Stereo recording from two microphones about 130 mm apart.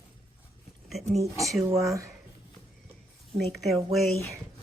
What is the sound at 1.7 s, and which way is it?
Speech, 25° right (ahead or behind).